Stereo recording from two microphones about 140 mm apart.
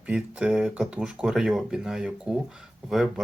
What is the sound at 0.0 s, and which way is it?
Speech, 10° right (ahead or behind).